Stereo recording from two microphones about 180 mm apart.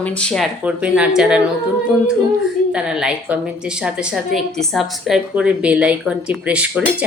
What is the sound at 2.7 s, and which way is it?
A woman's voice, 5° right (ahead or behind).